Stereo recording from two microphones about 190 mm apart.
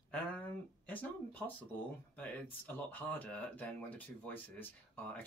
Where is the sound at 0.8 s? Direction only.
10° left (ahead or behind).